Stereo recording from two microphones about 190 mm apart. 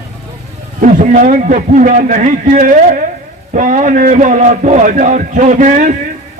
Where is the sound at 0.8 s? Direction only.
45° right (ahead or behind).